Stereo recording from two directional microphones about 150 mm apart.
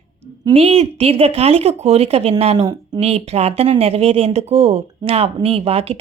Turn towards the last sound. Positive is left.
turn(degrees=-40)  # may be behind; listen again after turning